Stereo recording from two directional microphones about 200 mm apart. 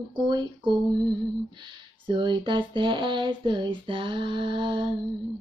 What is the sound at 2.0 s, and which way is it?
Speech, 25° right (ahead or behind).